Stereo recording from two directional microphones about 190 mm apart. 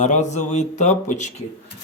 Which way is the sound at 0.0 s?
40° left (ahead or behind).